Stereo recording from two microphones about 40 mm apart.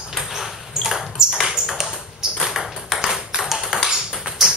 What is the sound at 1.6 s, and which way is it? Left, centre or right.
Ping, centre.